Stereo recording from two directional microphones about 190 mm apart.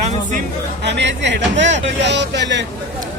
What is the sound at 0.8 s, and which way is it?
Speech, 65° right (ahead or behind).